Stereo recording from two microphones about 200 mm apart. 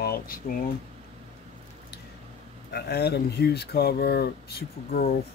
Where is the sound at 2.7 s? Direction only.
55° left (ahead or behind).